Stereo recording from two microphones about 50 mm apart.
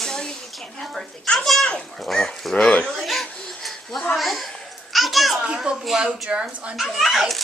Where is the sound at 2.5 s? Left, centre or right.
Left.